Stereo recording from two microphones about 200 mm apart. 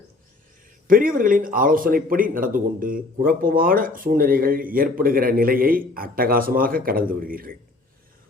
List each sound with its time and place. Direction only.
0.9 s speech: 45° right (ahead or behind)